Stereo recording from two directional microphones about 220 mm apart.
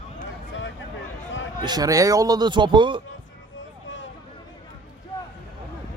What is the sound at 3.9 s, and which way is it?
Vehicle, 55° left (ahead or behind).